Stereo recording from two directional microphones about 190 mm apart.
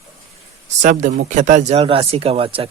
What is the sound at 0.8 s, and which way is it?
Speech, 40° right (ahead or behind).